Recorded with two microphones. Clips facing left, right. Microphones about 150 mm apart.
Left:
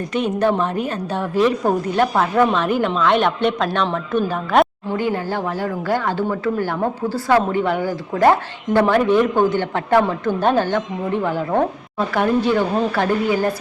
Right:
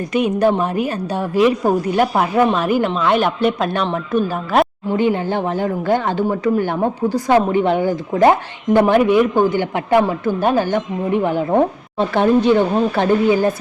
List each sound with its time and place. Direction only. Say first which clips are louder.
0.1 s a woman's voice: right 3 dB; 10° right (ahead or behind)
4.9 s speech: right 4 dB; 20° right (ahead or behind)